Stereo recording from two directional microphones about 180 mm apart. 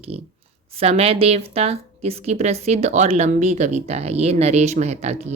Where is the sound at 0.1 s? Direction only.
35° right (ahead or behind).